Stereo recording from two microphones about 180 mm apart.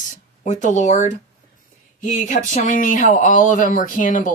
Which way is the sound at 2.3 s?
45° left (ahead or behind).